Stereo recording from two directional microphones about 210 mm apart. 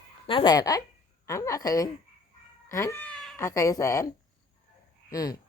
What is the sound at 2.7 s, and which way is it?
Cat, 15° left (ahead or behind).